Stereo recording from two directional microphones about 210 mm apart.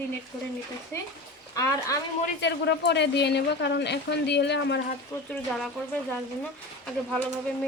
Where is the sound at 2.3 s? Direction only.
55° left (ahead or behind).